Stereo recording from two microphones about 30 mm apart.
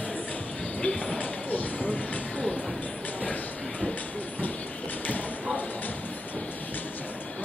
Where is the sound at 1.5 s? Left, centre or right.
Left.